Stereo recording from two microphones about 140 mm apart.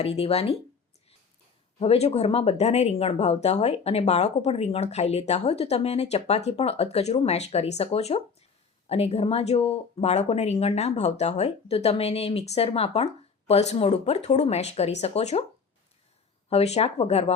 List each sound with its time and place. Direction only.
0.0 s speech: 45° left (ahead or behind)
1.8 s speech: 45° left (ahead or behind)
16.5 s speech: 50° left (ahead or behind)